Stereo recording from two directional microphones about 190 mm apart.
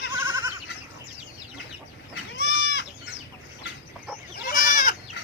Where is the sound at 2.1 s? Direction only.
60° left (ahead or behind).